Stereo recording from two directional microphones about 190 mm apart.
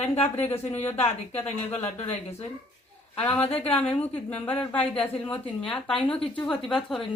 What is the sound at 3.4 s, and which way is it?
Speech, 30° left (ahead or behind).